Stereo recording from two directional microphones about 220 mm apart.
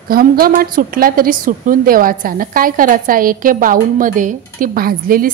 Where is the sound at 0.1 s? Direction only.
40° right (ahead or behind).